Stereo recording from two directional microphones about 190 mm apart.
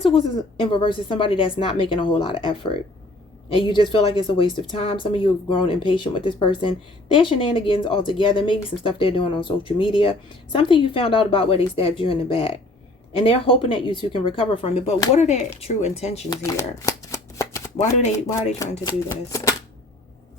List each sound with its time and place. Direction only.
0.0 s speech: 30° left (ahead or behind)
16.3 s shuffling cards: 20° left (ahead or behind)
19.0 s speech: 15° left (ahead or behind)